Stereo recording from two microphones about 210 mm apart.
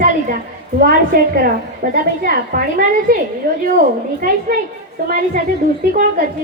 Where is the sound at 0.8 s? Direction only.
45° right (ahead or behind).